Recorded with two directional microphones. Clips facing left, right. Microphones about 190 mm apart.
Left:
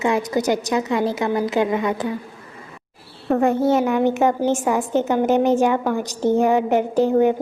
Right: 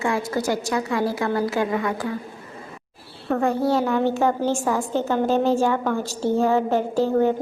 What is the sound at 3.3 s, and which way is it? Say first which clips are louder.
A woman's voice: left 4 dB; 20° left (ahead or behind).